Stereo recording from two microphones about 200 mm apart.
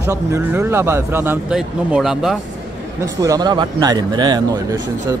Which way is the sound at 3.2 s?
20° right (ahead or behind).